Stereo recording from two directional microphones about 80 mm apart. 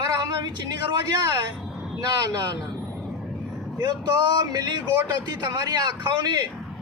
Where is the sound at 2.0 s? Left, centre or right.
Right.